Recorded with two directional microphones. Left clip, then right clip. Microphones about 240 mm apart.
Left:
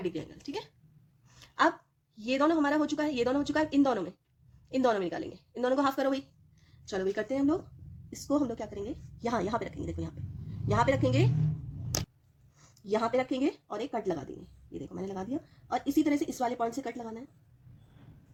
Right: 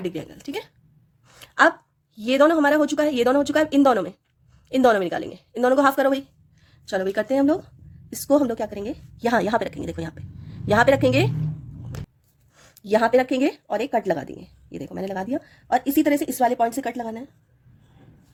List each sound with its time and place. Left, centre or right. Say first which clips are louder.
0.0 s speech: right 6 dB; right
1.3 s a sound: right 10 dB; right
2.1 s a woman's voice: right 10 dB; right
12.5 s a woman's voice: right 11 dB; right